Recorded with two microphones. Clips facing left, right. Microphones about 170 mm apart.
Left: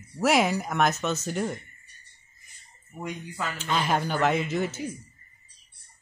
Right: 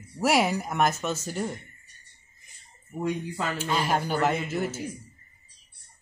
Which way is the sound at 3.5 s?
10° right (ahead or behind).